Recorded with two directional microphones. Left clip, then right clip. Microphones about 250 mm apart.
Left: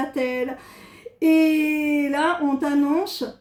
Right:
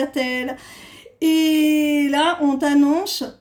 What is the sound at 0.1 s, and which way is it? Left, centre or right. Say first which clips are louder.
Speech: right 1 dB; right.